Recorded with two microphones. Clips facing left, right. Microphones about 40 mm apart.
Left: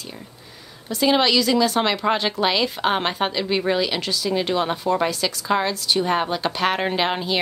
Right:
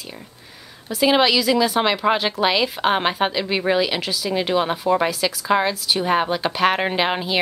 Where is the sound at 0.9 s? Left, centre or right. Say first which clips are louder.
Right 1 dB; centre.